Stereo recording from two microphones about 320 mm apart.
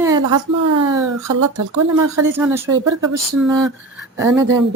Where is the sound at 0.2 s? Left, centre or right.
Right.